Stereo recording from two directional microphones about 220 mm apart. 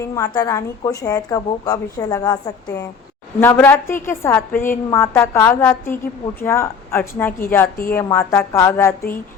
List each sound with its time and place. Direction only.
0.0 s a woman's voice: 15° left (ahead or behind)
3.4 s a woman's voice: 10° left (ahead or behind)